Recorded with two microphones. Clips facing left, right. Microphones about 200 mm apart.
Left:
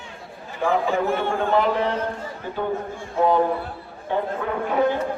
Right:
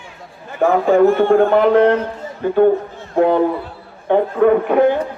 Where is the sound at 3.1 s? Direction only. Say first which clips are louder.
Right 5 dB; 60° right (ahead or behind).